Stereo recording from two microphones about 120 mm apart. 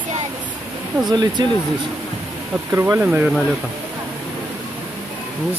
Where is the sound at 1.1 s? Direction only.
35° right (ahead or behind).